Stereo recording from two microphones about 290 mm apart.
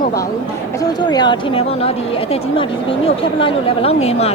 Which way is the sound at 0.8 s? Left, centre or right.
Centre.